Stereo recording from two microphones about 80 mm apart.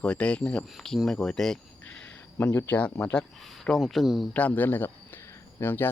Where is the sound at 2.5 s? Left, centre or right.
Left.